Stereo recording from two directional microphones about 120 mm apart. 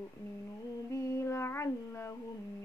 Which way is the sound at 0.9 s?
25° left (ahead or behind).